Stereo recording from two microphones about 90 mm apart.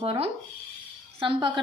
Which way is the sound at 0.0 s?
90° right.